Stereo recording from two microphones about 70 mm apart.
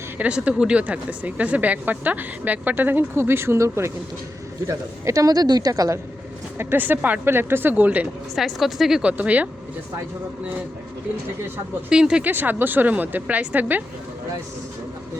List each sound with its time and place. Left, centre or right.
0.2 s a woman's voice: centre; by 3.9 s right
4.7 s speech: right
6.6 s a woman's voice: right
8.4 s a woman's voice: centre
9.0 s a woman's voice: centre
11.9 s speech: centre
12.2 s a woman's voice: right